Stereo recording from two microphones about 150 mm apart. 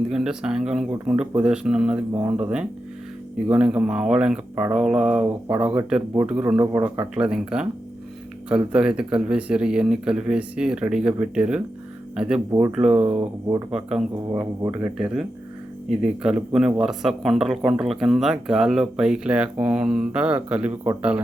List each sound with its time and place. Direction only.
0.1 s a man's voice: 5° right (ahead or behind)
14.3 s speech: 25° right (ahead or behind)
14.8 s a man's voice: 10° right (ahead or behind)